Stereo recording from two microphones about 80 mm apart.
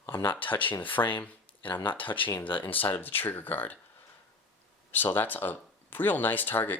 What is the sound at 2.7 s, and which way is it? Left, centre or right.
Speech, left.